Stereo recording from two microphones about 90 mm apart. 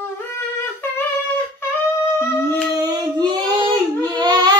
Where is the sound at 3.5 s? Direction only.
50° right (ahead or behind).